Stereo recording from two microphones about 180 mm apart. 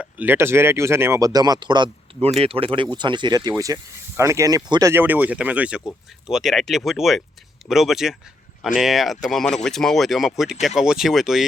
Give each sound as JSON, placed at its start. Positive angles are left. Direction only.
{"t": 0.0, "sound": "speech", "side_deg": -10}